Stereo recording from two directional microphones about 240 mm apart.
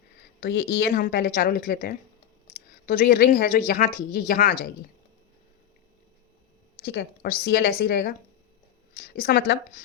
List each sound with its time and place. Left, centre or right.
0.3 s speech: left
6.7 s speech: left